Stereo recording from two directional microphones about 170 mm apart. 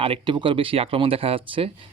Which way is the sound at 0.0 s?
30° right (ahead or behind).